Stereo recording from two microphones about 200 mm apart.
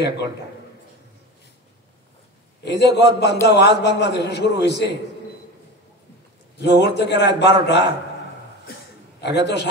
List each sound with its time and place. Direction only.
2.6 s a man's voice: 60° left (ahead or behind)
6.6 s a man's voice: 60° left (ahead or behind)
9.2 s a man's voice: 60° left (ahead or behind)